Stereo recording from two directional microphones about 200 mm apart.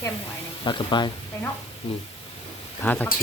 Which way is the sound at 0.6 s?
25° left (ahead or behind).